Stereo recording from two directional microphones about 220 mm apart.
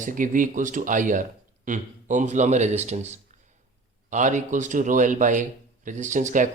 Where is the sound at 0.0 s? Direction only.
35° right (ahead or behind).